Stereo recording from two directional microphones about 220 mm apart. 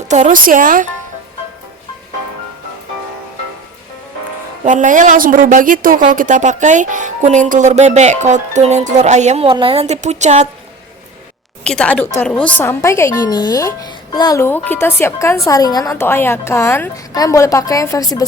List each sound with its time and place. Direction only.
0.1 s a woman's voice: 35° right (ahead or behind)
4.6 s a woman's voice: 35° right (ahead or behind)
11.6 s a woman's voice: 5° left (ahead or behind)